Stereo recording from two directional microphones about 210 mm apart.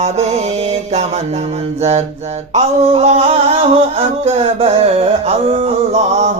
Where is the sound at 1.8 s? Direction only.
30° right (ahead or behind).